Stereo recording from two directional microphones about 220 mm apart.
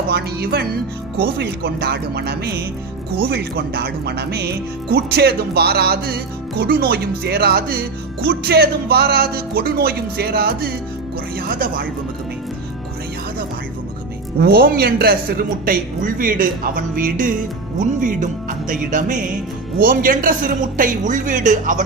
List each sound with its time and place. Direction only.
0.1 s speech: 45° right (ahead or behind)
14.3 s speech: 45° right (ahead or behind)